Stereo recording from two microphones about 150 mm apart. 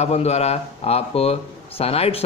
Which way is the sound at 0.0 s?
45° left (ahead or behind).